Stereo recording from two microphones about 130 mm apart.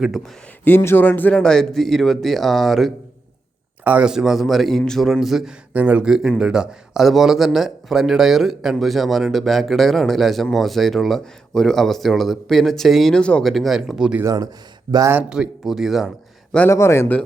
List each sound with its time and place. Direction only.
0.0 s a man's voice: centre (ahead or behind)
0.6 s a man's voice: 15° left (ahead or behind); by 14.3 s 5° right (ahead or behind)
14.3 s speech: 30° right (ahead or behind)
15.1 s speech: 10° right (ahead or behind)
16.6 s speech: 20° left (ahead or behind)